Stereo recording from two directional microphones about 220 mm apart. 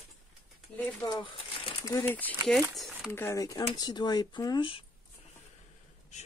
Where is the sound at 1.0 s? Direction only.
20° left (ahead or behind); by 3.1 s centre (ahead or behind).